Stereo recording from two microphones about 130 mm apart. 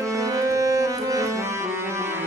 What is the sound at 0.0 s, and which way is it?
Music, 25° right (ahead or behind).